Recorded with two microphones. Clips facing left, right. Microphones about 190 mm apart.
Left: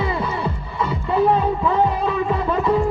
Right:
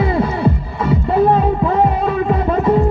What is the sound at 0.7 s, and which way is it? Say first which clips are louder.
Music: right 2 dB; 55° right (ahead or behind).